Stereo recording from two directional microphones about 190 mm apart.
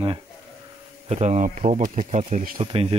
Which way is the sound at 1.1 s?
40° right (ahead or behind).